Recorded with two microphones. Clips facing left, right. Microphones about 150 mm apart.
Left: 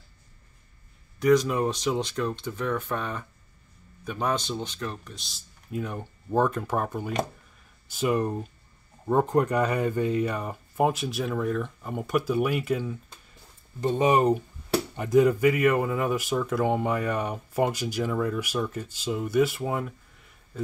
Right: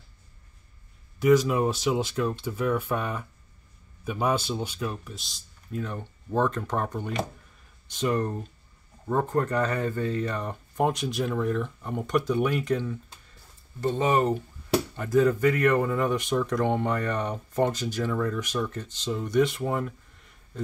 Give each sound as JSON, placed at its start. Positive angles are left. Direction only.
{"t": 1.2, "sound": "a man's voice", "side_deg": -5}
{"t": 5.7, "sound": "speech", "side_deg": 10}